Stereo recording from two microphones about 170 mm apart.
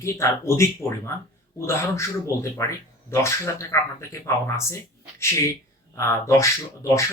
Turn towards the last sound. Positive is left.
turn(degrees=15)  # may be behind; listen again after turning